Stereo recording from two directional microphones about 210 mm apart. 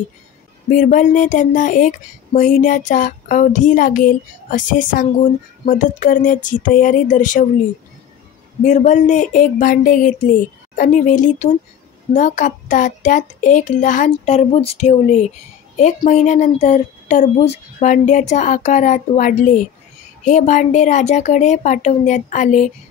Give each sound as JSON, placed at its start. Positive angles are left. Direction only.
{"t": 0.7, "sound": "speech", "side_deg": 35}
{"t": 8.6, "sound": "speech", "side_deg": 35}